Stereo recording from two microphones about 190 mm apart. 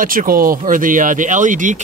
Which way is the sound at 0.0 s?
45° right (ahead or behind).